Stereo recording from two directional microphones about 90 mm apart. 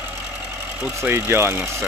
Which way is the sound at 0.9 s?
30° right (ahead or behind).